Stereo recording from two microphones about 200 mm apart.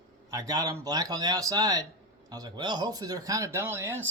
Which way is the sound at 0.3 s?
20° right (ahead or behind).